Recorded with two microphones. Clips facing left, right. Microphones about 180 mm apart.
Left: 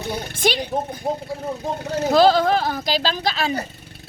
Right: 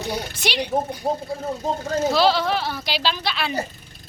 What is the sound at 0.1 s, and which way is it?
Speech, 50° left (ahead or behind).